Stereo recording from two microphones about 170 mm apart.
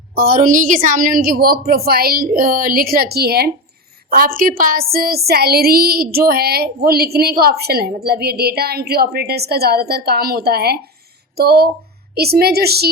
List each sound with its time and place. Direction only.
0.1 s a woman's voice: 60° right (ahead or behind)